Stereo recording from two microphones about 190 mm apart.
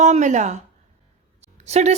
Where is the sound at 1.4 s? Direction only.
35° right (ahead or behind).